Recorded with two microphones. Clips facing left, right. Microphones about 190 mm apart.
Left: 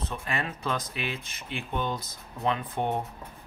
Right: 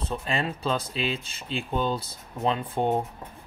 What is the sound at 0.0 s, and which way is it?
Speech, 30° right (ahead or behind).